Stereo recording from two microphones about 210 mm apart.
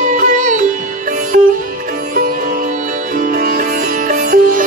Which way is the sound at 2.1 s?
45° right (ahead or behind).